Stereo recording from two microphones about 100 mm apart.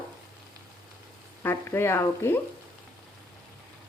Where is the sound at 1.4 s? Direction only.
25° left (ahead or behind).